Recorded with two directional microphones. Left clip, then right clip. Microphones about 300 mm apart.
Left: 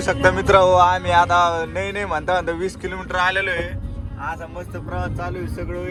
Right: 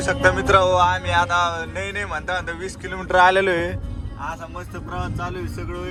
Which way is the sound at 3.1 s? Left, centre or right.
Right.